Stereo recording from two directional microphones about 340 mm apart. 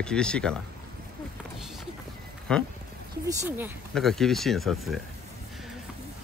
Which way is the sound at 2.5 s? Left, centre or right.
Centre.